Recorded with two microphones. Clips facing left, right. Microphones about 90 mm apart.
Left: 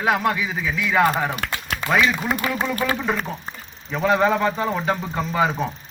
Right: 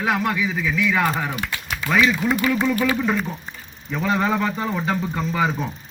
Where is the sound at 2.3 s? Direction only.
35° left (ahead or behind).